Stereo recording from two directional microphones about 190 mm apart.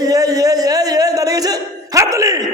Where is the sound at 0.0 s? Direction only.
20° right (ahead or behind).